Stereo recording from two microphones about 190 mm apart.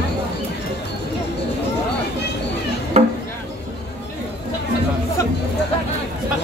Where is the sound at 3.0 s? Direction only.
35° right (ahead or behind).